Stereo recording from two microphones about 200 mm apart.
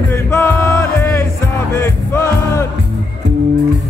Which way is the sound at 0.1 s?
15° left (ahead or behind).